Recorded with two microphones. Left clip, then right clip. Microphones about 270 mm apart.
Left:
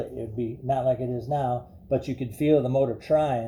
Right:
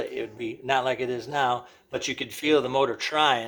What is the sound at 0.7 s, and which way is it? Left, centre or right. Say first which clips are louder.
Speech: even; right.